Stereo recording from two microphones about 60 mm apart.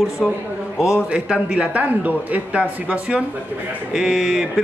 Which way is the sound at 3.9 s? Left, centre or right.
Centre.